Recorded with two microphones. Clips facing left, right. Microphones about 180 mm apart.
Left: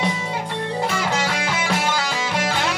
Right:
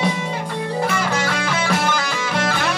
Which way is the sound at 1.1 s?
20° left (ahead or behind).